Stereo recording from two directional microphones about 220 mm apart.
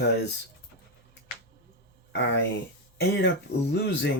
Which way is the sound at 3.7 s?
50° left (ahead or behind).